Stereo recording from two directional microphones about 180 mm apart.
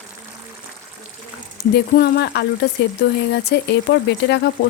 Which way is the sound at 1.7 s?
65° left (ahead or behind).